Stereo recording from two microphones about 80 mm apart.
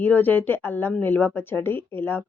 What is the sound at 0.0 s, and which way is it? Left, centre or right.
Speech, left.